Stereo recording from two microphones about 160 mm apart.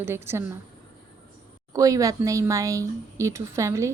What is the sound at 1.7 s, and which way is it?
Speech, 20° right (ahead or behind).